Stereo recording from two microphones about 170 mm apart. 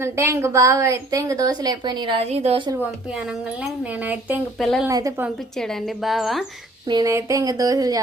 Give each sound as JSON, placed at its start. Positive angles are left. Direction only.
{"t": 0.0, "sound": "a woman's voice", "side_deg": -15}
{"t": 3.6, "sound": "speech", "side_deg": -10}
{"t": 4.6, "sound": "a woman's voice", "side_deg": 0}
{"t": 4.9, "sound": "a woman's voice", "side_deg": -20}
{"t": 5.5, "sound": "a woman's voice", "side_deg": 0}
{"t": 6.8, "sound": "a woman's voice", "side_deg": -25}